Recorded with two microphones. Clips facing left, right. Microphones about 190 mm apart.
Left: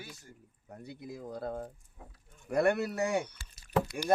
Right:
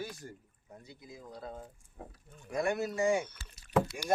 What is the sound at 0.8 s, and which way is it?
Speech, 60° left (ahead or behind).